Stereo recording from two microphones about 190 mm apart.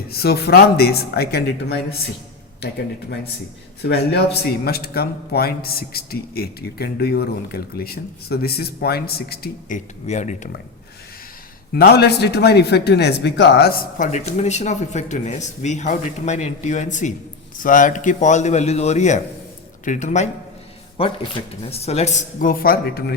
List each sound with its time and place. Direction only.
0.1 s a man's voice: 55° left (ahead or behind)
3.8 s a man's voice: 60° left (ahead or behind); by 10.5 s 40° left (ahead or behind)
11.7 s speech: 55° left (ahead or behind); by 20.2 s 40° left (ahead or behind)
21.0 s speech: 30° left (ahead or behind); by 23.1 s 55° left (ahead or behind)